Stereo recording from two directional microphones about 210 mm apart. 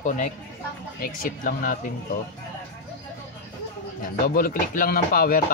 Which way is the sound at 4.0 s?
40° left (ahead or behind).